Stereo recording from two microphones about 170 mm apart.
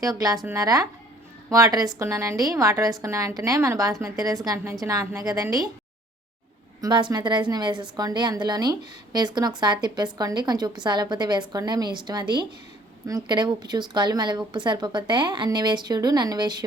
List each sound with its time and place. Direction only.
0.0 s a woman's voice: 20° right (ahead or behind)
6.8 s a woman's voice: 25° right (ahead or behind)